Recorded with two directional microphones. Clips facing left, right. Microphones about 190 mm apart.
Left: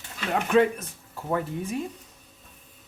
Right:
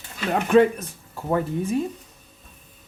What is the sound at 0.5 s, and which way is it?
Speech, 35° right (ahead or behind).